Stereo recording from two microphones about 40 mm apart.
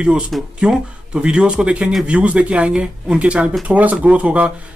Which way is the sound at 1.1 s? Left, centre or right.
Right.